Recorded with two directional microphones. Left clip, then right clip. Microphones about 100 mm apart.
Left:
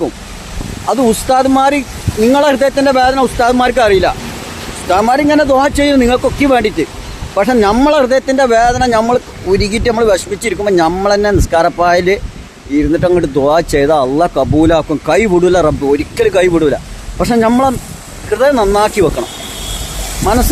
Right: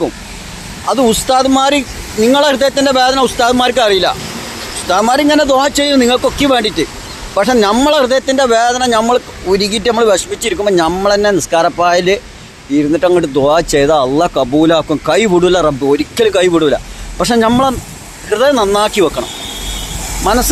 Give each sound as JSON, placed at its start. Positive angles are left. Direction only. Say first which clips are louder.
{"t": 0.9, "sound": "speech", "louder": "even", "side_deg": 5}
{"t": 20.2, "sound": "speech", "louder": "even", "side_deg": 20}